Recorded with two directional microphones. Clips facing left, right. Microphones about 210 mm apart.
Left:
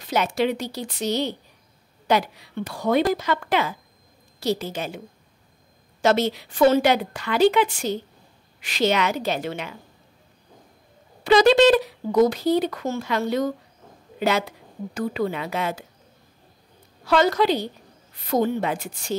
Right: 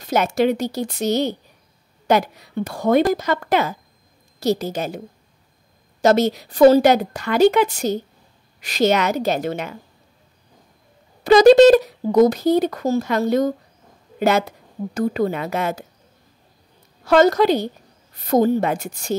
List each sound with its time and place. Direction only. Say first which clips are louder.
0.0 s speech: right 4 dB; 45° right (ahead or behind)
11.2 s speech: right 6 dB; 45° right (ahead or behind)
17.0 s speech: right 5 dB; 45° right (ahead or behind)